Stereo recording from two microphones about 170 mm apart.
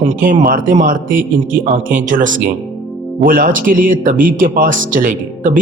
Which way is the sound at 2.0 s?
50° right (ahead or behind).